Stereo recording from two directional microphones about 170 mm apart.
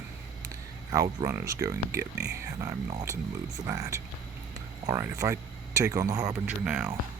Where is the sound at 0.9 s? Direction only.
20° right (ahead or behind).